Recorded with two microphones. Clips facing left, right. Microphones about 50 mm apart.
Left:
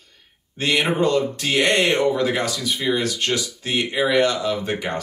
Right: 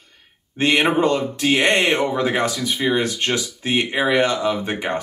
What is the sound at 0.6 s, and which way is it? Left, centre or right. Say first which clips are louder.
Speech: right 3 dB; right.